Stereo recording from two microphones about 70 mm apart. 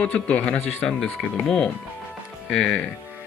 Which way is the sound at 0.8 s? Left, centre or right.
Centre.